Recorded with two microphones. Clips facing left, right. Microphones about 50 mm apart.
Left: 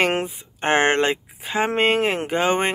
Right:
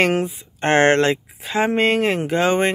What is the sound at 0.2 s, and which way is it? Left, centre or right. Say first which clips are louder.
Speech: right 3 dB; centre.